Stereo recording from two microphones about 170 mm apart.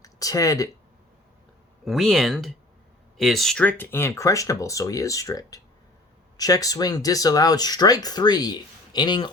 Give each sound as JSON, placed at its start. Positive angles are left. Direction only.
{"t": 0.0, "sound": "speech", "side_deg": 20}
{"t": 1.8, "sound": "speech", "side_deg": 0}